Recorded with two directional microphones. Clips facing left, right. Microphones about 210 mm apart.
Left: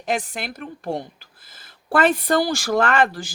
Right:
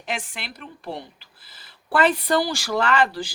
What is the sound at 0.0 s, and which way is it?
Speech, 40° left (ahead or behind).